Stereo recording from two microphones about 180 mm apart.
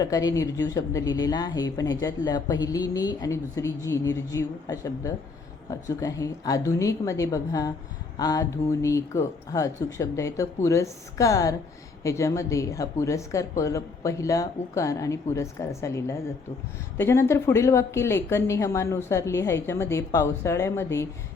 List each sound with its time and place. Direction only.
0.0 s a woman's voice: 20° left (ahead or behind)